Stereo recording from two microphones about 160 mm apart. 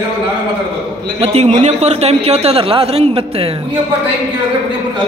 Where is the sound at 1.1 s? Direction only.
40° right (ahead or behind).